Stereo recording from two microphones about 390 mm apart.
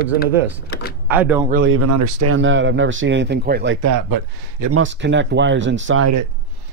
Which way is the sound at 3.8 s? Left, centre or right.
Right.